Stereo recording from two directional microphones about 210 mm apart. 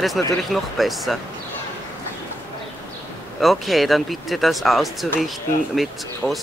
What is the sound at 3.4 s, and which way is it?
Speech, centre (ahead or behind).